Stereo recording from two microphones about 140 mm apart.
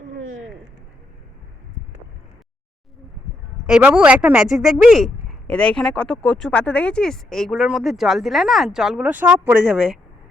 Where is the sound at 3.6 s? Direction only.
5° right (ahead or behind).